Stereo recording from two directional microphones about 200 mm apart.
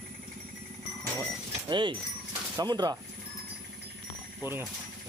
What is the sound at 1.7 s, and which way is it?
Speech, 25° right (ahead or behind).